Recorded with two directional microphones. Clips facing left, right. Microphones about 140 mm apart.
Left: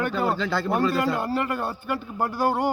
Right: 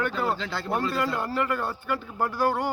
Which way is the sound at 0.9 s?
15° left (ahead or behind).